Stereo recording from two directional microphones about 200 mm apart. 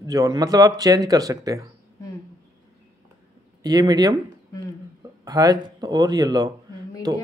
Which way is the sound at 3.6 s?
20° right (ahead or behind).